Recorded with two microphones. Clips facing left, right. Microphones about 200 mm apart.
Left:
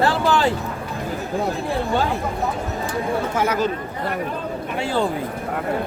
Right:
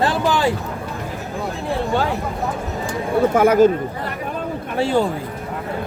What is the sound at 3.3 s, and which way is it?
Speech, 50° right (ahead or behind).